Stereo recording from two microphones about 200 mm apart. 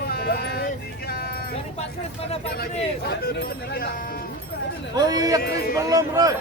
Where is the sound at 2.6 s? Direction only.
50° left (ahead or behind).